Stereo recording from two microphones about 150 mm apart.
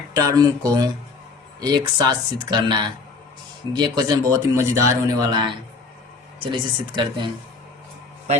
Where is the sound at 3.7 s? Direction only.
25° right (ahead or behind).